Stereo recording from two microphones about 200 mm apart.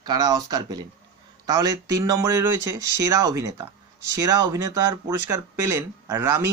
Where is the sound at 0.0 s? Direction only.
20° right (ahead or behind).